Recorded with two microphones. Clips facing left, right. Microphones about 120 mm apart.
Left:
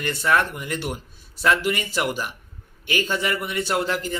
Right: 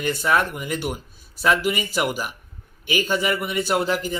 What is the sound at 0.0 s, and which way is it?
A man's voice, 10° right (ahead or behind).